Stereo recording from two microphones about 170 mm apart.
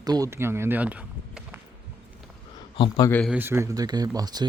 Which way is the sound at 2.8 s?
20° left (ahead or behind).